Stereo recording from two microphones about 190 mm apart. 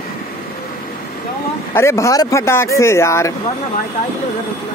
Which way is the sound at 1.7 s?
15° left (ahead or behind).